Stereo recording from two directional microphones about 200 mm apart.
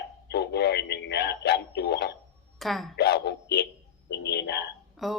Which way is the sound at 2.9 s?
55° left (ahead or behind).